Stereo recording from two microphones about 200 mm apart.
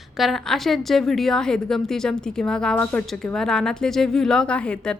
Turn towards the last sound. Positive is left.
turn(degrees=5)  # may be behind; listen again after turning